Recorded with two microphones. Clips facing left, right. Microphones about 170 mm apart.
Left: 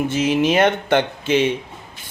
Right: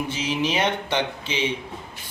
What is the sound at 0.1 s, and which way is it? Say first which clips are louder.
A man's voice: left 8 dB; 50° left (ahead or behind).